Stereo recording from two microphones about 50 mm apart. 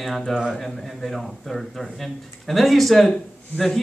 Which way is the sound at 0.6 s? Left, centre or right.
Centre.